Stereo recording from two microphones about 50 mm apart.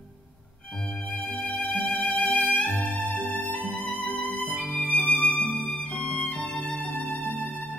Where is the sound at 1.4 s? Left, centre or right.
Left.